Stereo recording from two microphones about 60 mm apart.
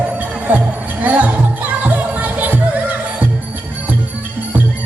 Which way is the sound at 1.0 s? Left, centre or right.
Right.